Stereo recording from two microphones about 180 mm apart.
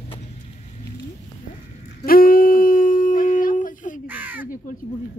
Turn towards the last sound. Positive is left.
turn(degrees=-10)  # may be behind; listen again after turning